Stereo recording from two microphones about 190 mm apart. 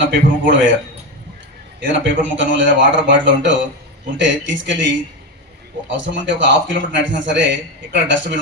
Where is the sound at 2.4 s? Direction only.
75° right (ahead or behind).